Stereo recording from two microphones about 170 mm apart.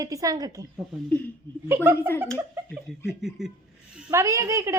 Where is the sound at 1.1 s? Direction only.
10° left (ahead or behind).